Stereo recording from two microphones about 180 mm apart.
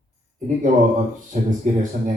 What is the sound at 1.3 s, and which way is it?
Speech, 45° right (ahead or behind).